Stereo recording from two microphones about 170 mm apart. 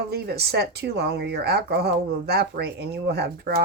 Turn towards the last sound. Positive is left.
turn(degrees=-70)  # may be behind; listen again after turning